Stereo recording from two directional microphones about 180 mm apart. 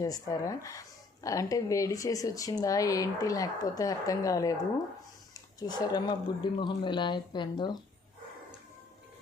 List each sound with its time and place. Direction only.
0.0 s speech: 20° left (ahead or behind)